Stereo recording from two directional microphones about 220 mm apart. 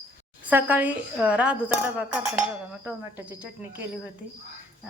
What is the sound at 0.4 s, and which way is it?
Speech, 10° right (ahead or behind).